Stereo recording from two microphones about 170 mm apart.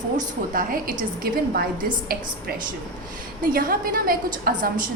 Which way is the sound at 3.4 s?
55° right (ahead or behind).